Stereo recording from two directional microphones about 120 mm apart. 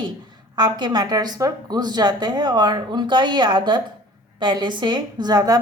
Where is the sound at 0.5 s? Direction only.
35° right (ahead or behind).